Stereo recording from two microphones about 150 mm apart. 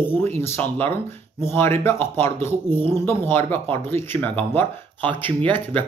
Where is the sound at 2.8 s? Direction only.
40° right (ahead or behind).